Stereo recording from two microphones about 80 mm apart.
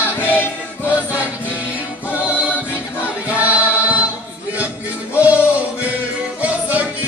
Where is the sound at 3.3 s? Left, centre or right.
Centre.